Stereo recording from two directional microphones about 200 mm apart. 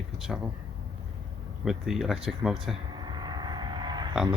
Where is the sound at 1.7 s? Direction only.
Centre (ahead or behind).